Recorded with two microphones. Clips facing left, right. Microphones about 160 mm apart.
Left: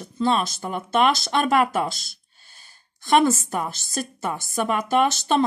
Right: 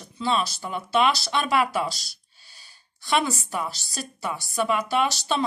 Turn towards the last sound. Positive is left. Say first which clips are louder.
# left 4 dB
turn(degrees=50)  # may be behind; listen again after turning